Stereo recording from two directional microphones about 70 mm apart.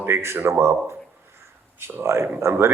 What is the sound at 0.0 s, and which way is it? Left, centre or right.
Speech, right.